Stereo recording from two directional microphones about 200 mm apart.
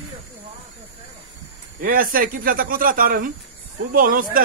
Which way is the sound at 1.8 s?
45° right (ahead or behind).